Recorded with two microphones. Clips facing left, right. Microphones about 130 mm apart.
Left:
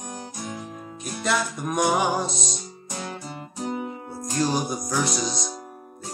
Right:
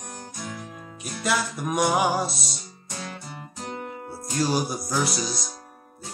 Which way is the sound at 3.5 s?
10° left (ahead or behind).